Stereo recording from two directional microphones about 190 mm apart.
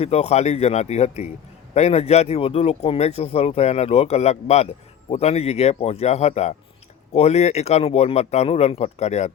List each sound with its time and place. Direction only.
0.0 s speech: 35° left (ahead or behind)